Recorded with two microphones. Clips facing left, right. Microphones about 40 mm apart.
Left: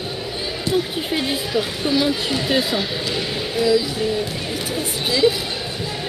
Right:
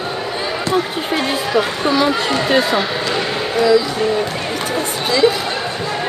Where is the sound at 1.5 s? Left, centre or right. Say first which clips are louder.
Right 5 dB; right.